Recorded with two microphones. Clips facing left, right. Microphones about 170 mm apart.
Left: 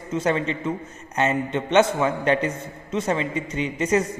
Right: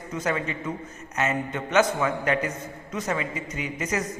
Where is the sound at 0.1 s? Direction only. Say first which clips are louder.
Left 5 dB; 25° left (ahead or behind).